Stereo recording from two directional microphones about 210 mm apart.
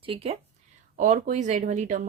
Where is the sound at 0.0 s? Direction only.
25° right (ahead or behind).